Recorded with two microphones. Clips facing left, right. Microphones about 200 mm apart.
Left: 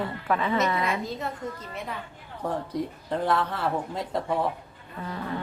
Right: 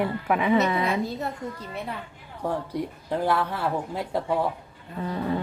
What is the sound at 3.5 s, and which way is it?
Speech, 5° right (ahead or behind).